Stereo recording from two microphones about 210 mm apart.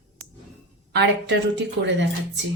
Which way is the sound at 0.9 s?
55° right (ahead or behind).